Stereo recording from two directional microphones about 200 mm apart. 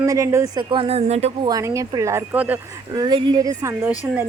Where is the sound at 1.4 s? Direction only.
15° right (ahead or behind).